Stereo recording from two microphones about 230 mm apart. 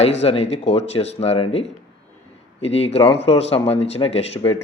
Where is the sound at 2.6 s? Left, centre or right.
Left.